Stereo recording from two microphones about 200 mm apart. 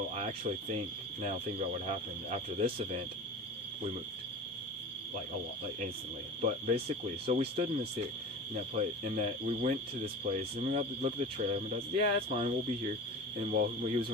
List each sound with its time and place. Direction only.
0.2 s speech: 35° right (ahead or behind)
6.4 s speech: 35° right (ahead or behind)